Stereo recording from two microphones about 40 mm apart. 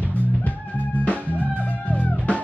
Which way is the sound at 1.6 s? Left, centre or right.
Left.